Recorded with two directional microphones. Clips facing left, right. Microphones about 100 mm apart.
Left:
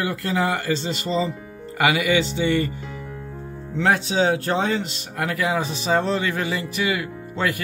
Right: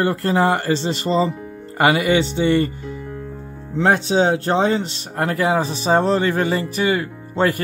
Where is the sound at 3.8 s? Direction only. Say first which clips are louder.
Right 3 dB; 35° right (ahead or behind).